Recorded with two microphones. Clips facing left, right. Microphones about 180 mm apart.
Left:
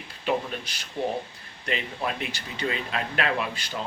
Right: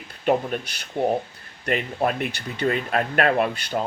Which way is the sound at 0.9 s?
50° right (ahead or behind).